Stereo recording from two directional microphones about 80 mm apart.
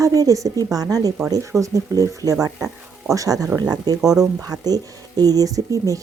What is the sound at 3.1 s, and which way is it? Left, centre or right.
Speech, right.